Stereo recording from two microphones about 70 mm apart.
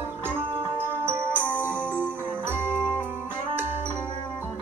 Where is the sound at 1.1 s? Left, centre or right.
Right.